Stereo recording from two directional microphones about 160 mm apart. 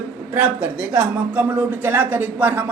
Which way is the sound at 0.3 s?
10° right (ahead or behind).